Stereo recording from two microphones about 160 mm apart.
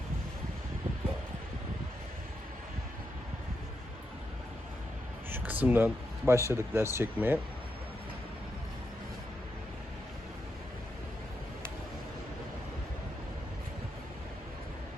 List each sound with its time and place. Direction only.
5.3 s speech: 10° right (ahead or behind)